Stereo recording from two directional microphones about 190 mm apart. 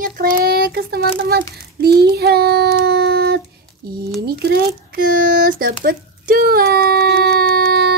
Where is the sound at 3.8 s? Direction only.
55° right (ahead or behind).